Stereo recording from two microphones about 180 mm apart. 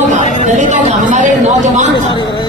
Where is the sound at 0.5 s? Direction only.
45° right (ahead or behind).